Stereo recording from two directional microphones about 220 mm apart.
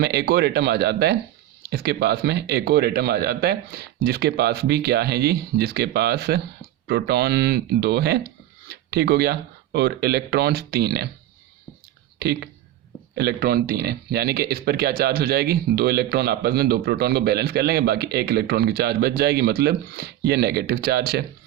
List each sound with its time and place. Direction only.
0.0 s speech: 45° right (ahead or behind)
12.2 s speech: 50° right (ahead or behind)